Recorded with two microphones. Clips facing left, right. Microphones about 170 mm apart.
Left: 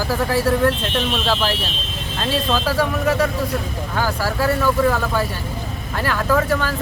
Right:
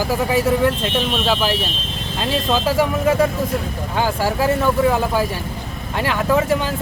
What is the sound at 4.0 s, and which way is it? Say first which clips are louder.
Speech: right 2 dB; 20° right (ahead or behind).